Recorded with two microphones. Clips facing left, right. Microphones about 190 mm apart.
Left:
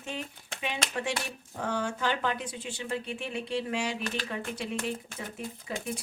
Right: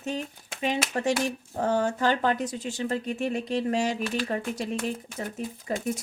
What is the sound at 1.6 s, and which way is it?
Speech, 40° right (ahead or behind).